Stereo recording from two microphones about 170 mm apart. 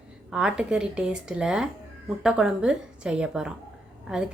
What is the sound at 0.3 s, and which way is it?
A woman's voice, 5° right (ahead or behind).